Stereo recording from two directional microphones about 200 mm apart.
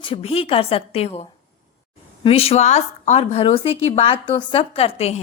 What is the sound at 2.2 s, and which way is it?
A woman's voice, 30° left (ahead or behind).